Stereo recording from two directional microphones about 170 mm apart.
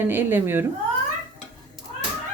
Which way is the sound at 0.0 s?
10° right (ahead or behind).